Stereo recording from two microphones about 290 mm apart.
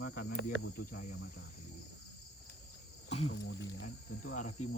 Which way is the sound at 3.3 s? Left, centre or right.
Left.